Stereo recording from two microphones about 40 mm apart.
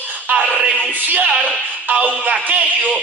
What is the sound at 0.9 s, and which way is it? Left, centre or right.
Music, right.